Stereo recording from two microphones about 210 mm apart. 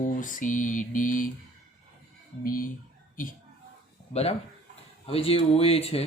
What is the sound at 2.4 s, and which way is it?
Speech, 45° left (ahead or behind).